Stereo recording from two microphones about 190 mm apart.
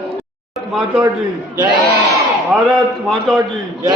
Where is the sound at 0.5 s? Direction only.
Centre (ahead or behind).